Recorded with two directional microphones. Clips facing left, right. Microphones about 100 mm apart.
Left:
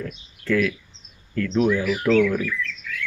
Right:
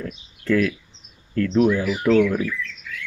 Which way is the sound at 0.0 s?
30° right (ahead or behind).